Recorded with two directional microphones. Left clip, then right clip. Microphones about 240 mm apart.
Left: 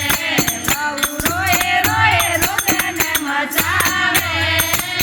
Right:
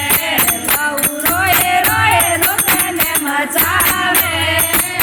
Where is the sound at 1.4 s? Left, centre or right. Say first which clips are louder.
Right 3 dB; centre.